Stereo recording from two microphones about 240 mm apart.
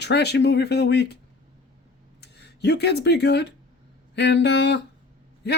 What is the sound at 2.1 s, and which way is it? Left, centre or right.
Speech, left.